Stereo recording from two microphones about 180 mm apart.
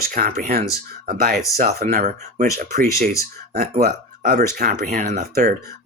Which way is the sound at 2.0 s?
40° right (ahead or behind).